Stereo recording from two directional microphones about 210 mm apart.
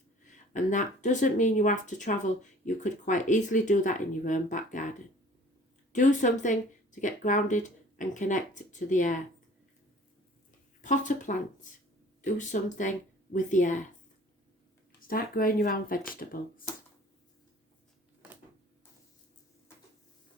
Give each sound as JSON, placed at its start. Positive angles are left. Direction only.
{"t": 0.3, "sound": "speech", "side_deg": 35}
{"t": 10.8, "sound": "speech", "side_deg": 35}
{"t": 15.0, "sound": "speech", "side_deg": 45}